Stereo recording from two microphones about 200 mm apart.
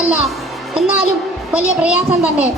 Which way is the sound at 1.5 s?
5° right (ahead or behind).